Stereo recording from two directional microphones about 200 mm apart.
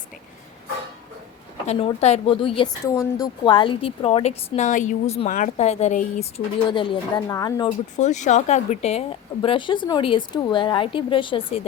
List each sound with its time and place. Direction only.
1.6 s a woman's voice: 30° left (ahead or behind)
2.8 s a woman's voice: 15° left (ahead or behind)
7.9 s a woman's voice: 35° left (ahead or behind)